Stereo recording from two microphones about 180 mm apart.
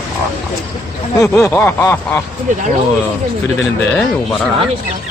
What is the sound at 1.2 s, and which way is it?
Snicker, 10° left (ahead or behind).